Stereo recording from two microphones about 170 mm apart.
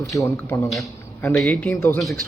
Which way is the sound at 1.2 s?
5° left (ahead or behind).